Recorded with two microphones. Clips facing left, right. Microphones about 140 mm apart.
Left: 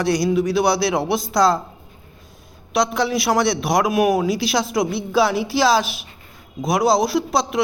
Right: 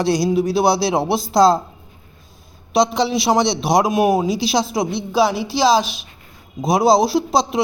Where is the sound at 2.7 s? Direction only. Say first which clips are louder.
Right 3 dB; 25° right (ahead or behind).